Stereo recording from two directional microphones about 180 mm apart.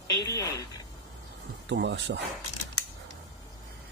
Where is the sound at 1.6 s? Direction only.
75° right (ahead or behind).